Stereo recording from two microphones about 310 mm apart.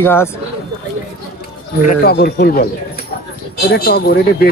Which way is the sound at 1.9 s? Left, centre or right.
Left.